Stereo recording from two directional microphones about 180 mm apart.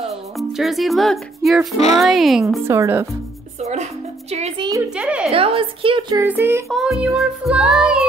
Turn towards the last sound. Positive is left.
turn(degrees=-5)  # may be behind; listen again after turning